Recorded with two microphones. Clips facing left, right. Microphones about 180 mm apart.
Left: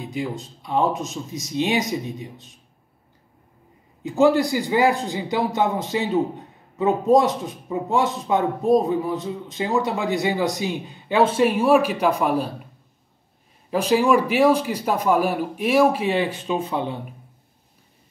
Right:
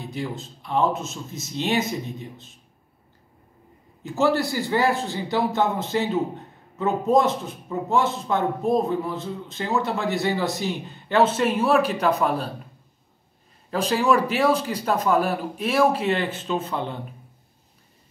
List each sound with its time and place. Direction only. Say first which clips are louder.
0.1 s speech: left 3 dB; 15° left (ahead or behind)
4.0 s speech: left 4 dB; 15° left (ahead or behind)
7.2 s speech: left 1 dB; 15° left (ahead or behind)
13.7 s speech: left 3 dB; 10° left (ahead or behind)